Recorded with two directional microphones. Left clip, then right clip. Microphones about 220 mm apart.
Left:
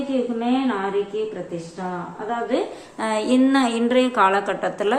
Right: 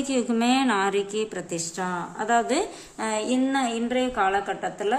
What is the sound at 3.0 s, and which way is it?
A woman's voice, 15° right (ahead or behind).